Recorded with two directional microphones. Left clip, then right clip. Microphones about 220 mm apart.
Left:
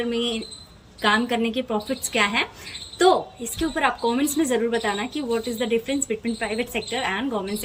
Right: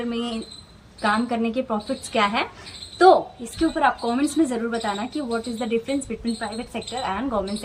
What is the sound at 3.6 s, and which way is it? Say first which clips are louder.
A woman's voice: right 2 dB; 40° right (ahead or behind).